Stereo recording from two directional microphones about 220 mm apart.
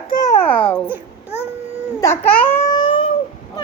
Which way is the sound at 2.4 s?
20° left (ahead or behind).